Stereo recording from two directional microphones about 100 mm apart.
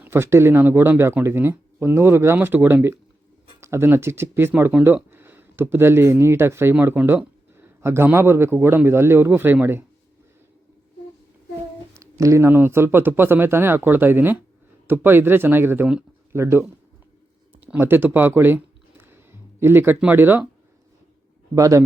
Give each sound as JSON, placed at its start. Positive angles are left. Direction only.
{"t": 0.0, "sound": "speech", "side_deg": -25}
{"t": 11.9, "sound": "speech", "side_deg": -30}
{"t": 17.7, "sound": "a sound", "side_deg": -20}
{"t": 20.0, "sound": "speech", "side_deg": -20}
{"t": 21.5, "sound": "a man's voice", "side_deg": -35}